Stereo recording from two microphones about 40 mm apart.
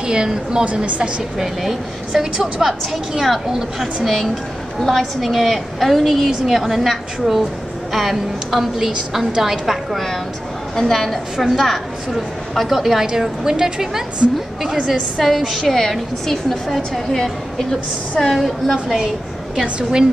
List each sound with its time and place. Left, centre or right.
0.0 s a woman's voice: right
0.8 s a woman's voice: right
1.4 s a woman's voice: centre
10.8 s a woman's voice: centre
13.2 s a woman's voice: centre
14.9 s a woman's voice: centre
19.6 s a woman's voice: centre